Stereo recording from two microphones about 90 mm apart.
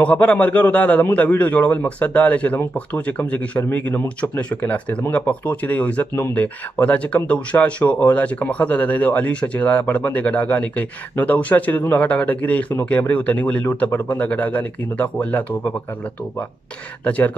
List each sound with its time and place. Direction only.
0.0 s speech: 15° left (ahead or behind)
17.0 s speech: 20° left (ahead or behind)